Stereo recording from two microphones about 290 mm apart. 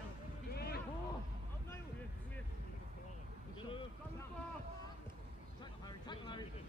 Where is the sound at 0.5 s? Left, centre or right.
Left.